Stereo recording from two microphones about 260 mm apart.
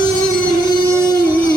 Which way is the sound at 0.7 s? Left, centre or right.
Centre.